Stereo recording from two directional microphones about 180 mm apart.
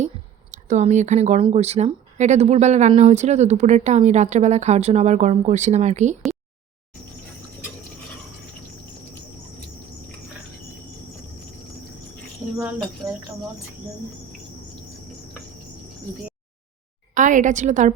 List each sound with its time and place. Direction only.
0.7 s speech: 40° right (ahead or behind)
13.0 s speech: 20° right (ahead or behind)
17.2 s a woman's voice: 45° right (ahead or behind)